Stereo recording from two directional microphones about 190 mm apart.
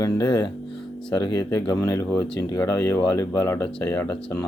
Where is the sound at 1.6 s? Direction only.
20° left (ahead or behind).